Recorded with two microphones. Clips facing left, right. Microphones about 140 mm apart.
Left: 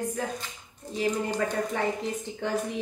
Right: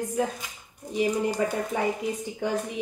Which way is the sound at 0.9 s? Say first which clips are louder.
Right 3 dB; 10° right (ahead or behind).